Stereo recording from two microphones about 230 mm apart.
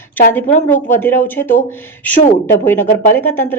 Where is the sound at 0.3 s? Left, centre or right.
Centre.